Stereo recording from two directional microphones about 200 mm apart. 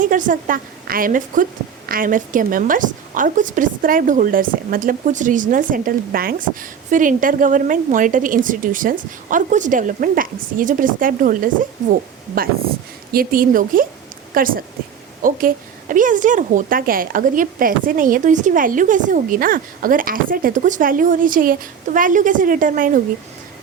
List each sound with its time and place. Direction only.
0.0 s a woman's voice: 40° right (ahead or behind)